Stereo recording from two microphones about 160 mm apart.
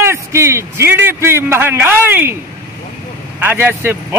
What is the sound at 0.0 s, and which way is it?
A man's voice, 15° right (ahead or behind).